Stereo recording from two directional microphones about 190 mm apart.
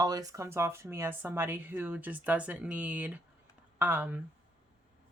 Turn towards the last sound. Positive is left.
turn(degrees=-10)  # may be behind; listen again after turning